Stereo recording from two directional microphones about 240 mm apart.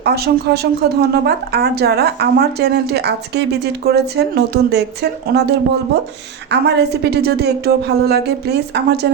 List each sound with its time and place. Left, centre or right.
0.0 s speech: right